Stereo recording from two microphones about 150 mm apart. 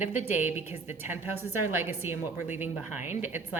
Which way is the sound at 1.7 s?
15° right (ahead or behind).